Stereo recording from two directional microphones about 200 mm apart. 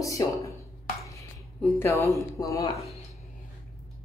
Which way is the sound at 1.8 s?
15° left (ahead or behind).